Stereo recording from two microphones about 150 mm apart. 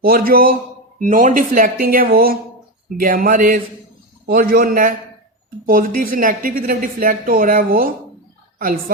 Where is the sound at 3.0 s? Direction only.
70° right (ahead or behind).